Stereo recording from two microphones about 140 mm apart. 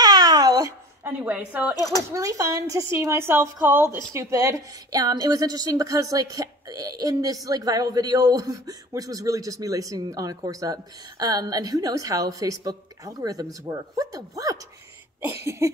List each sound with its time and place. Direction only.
0.0 s babbling: 30° right (ahead or behind)
1.2 s a woman's voice: 10° right (ahead or behind)
2.0 s speech: 20° right (ahead or behind)
15.6 s speech: 20° right (ahead or behind)